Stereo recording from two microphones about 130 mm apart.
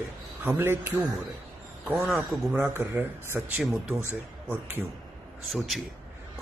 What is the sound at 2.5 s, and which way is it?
Speech, 15° right (ahead or behind).